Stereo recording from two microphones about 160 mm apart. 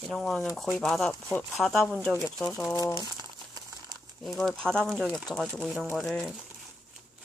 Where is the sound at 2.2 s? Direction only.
20° left (ahead or behind).